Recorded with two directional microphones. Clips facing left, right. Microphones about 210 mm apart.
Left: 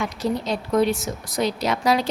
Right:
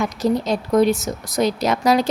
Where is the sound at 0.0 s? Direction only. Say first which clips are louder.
Right 5 dB; 45° right (ahead or behind).